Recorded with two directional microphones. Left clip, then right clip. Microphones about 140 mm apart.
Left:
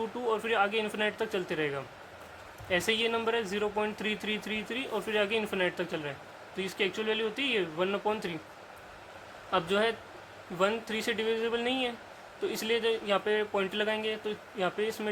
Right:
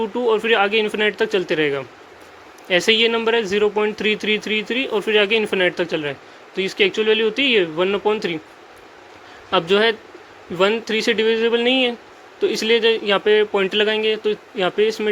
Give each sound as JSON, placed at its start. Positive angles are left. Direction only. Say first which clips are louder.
{"t": 0.2, "sound": "speech", "louder": "right 12 dB", "side_deg": -35}
{"t": 9.5, "sound": "speech", "louder": "right 12 dB", "side_deg": -40}